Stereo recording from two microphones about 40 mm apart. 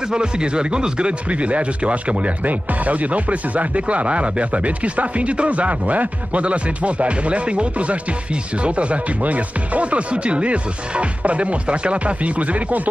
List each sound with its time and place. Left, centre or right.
0.1 s speech: right